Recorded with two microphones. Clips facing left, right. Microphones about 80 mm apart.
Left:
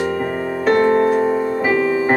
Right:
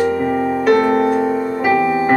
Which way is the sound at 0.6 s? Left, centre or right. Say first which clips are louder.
Left 1 dB; left.